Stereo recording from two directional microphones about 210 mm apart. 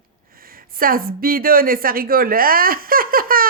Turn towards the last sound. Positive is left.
turn(degrees=-45)  # may be behind; listen again after turning